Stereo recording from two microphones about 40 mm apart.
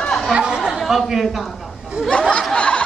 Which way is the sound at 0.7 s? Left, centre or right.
Centre.